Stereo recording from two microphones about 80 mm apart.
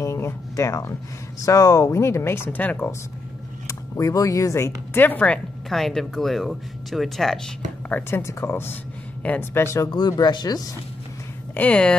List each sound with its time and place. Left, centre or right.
0.0 s a sound: left
1.4 s speech: left
3.6 s speech: left
5.0 s speech: centre
5.7 s speech: centre
7.9 s speech: left
9.8 s speech: left
11.5 s speech: centre